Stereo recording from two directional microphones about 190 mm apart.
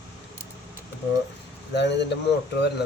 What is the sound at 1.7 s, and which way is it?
Speech, 65° left (ahead or behind).